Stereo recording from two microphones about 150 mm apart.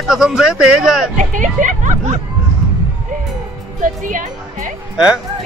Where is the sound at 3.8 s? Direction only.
60° right (ahead or behind).